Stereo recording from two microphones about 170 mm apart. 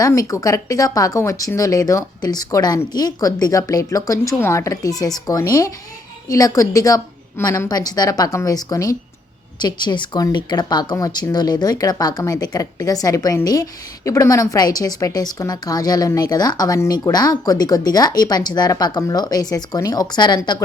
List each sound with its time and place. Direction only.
0.0 s speech: 20° left (ahead or behind)